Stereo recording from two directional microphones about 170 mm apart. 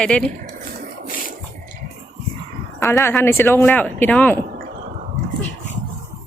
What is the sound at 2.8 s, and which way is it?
Speech, 15° left (ahead or behind).